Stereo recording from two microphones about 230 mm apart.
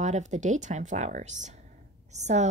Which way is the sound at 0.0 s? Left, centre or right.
Right.